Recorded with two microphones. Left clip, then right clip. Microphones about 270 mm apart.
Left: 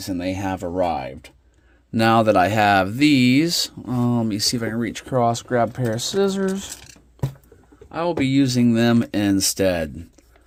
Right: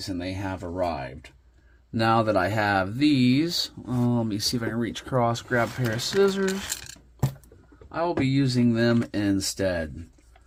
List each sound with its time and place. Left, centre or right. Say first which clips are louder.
0.0 s speech: left 6 dB; left; by 6.7 s centre
7.9 s speech: left 4 dB; left